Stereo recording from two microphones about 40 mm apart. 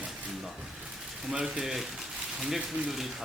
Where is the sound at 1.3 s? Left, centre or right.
Centre.